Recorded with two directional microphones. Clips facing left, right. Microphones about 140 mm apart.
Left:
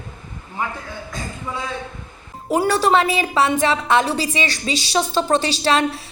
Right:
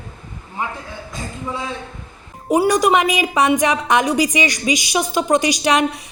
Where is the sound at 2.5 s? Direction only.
15° right (ahead or behind).